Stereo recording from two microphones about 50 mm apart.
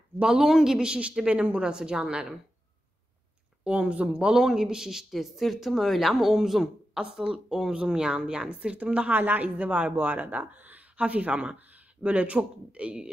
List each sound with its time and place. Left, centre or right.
0.2 s speech: centre
3.6 s speech: right
9.1 s speech: right; by 13.1 s centre